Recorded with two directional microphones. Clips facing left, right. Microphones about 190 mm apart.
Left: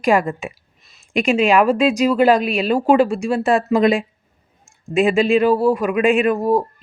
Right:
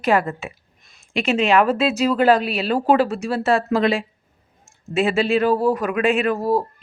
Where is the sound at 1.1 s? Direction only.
15° left (ahead or behind).